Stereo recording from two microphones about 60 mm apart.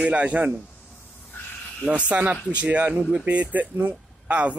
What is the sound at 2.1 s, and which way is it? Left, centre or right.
Speech, right.